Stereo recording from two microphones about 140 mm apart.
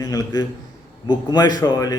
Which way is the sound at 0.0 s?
30° left (ahead or behind).